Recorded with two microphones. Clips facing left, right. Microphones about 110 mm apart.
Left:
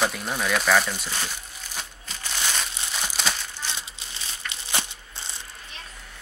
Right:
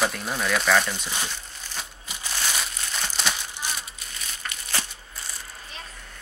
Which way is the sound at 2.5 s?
5° left (ahead or behind).